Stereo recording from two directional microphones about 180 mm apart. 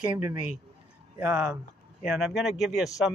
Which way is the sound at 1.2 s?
10° right (ahead or behind).